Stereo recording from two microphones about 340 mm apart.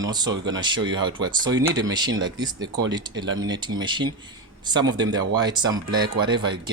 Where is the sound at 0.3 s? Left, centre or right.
Right.